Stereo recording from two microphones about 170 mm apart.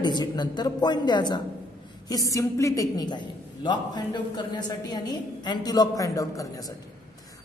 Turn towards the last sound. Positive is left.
turn(degrees=20)  # may be behind; listen again after turning